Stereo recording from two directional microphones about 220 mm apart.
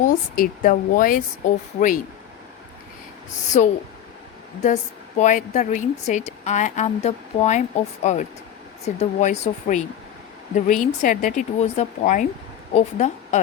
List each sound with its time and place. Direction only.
0.0 s a woman's voice: 40° left (ahead or behind)
3.6 s a woman's voice: 35° left (ahead or behind)